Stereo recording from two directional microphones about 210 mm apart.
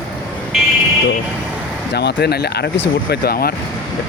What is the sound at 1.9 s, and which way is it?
Speech, 50° left (ahead or behind).